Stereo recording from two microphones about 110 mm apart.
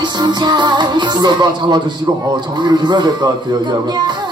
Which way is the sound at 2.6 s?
40° right (ahead or behind).